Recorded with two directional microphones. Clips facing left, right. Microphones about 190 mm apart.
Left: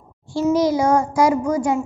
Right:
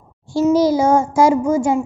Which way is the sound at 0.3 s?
35° right (ahead or behind).